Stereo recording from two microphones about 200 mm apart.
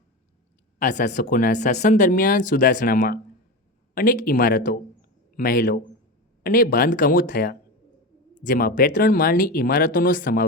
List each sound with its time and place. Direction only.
0.8 s speech: 40° left (ahead or behind)